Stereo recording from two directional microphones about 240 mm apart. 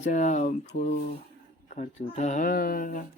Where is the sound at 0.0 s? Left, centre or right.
Left.